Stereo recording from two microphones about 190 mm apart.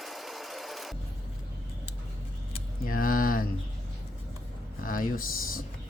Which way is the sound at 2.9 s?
45° left (ahead or behind).